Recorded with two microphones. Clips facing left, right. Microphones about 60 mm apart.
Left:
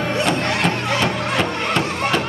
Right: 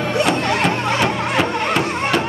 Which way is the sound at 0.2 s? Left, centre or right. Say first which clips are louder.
Right 3 dB; centre.